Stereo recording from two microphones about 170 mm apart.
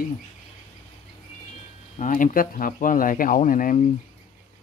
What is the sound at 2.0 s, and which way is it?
Speech, 50° left (ahead or behind).